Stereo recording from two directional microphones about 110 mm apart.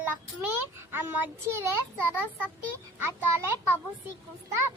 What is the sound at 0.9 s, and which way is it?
Speech, 20° right (ahead or behind).